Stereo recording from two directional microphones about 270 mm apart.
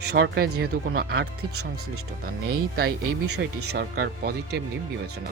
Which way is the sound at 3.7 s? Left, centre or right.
Right.